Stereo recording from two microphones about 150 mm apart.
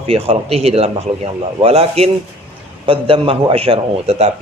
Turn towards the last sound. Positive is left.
turn(degrees=-40)  # may be behind; listen again after turning